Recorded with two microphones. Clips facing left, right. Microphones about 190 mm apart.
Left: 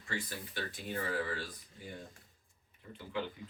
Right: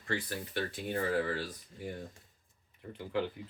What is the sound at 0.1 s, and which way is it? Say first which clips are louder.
Speech: right 5 dB; 65° right (ahead or behind).